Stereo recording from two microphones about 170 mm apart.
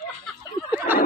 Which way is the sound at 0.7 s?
10° right (ahead or behind).